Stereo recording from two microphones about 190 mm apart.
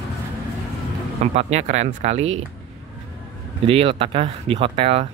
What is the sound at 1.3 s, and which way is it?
Speech, 35° right (ahead or behind).